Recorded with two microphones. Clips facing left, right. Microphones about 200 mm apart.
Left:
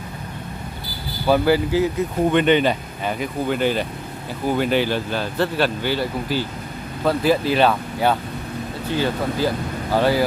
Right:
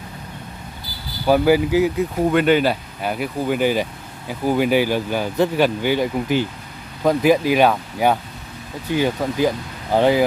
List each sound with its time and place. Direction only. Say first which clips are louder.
1.2 s speech: right 2 dB; 10° right (ahead or behind)